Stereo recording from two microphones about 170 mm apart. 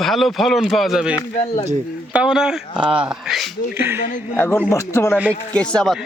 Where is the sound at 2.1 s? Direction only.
5° right (ahead or behind).